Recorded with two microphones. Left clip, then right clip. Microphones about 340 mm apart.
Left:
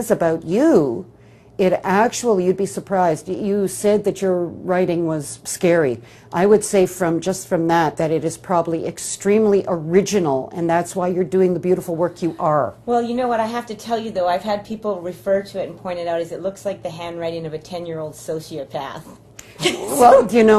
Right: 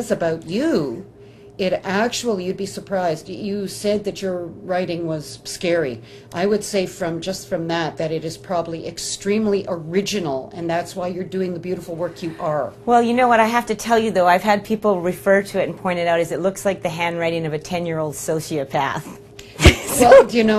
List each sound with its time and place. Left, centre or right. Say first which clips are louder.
0.0 s speech: left 3 dB; left
12.8 s a woman's voice: right 4 dB; right